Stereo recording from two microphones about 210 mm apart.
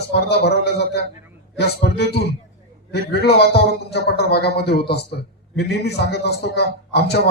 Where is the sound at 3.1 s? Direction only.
50° left (ahead or behind).